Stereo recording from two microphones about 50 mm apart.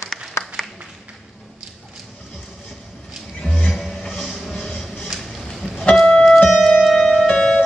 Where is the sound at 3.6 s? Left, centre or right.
Centre.